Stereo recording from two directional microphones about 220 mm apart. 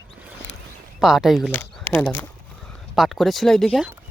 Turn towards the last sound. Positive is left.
turn(degrees=0)  # may be behind; listen again after turning